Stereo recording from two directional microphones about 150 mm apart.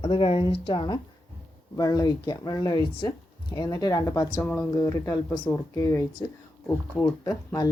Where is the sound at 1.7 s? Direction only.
25° left (ahead or behind).